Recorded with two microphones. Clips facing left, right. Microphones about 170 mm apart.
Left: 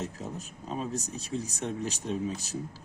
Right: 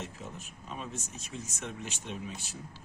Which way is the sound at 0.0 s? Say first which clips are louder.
Left 6 dB; 40° left (ahead or behind).